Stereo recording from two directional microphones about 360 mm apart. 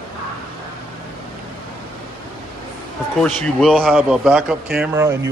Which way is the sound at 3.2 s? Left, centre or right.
Centre.